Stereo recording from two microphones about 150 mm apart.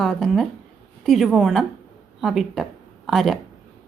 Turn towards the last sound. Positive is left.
turn(degrees=0)  # may be behind; listen again after turning